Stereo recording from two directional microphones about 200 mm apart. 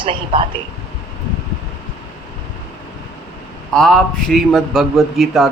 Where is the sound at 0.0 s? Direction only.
25° right (ahead or behind).